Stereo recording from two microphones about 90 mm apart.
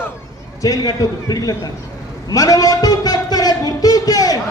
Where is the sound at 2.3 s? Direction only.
40° left (ahead or behind).